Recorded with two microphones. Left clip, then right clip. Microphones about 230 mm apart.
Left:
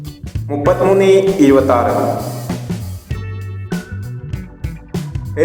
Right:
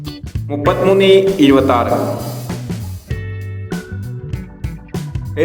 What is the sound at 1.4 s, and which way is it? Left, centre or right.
Speech, right.